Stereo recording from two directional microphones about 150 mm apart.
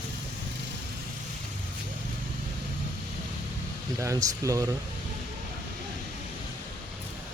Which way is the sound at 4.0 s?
20° right (ahead or behind).